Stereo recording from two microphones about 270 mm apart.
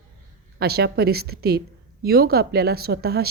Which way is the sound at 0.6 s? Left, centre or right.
Right.